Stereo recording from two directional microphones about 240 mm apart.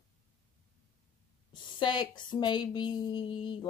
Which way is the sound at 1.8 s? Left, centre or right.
Centre.